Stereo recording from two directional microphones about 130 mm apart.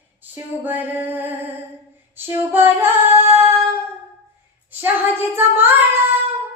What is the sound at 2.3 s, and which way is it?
Child singing, 15° right (ahead or behind).